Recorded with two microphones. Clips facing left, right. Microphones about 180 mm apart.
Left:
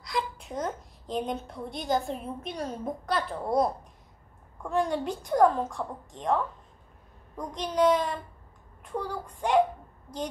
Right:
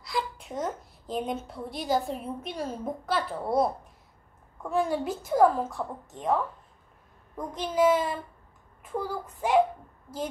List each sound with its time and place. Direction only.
0.0 s a woman's voice: centre (ahead or behind)